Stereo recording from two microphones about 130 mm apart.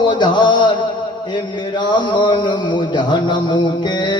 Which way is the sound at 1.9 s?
35° left (ahead or behind).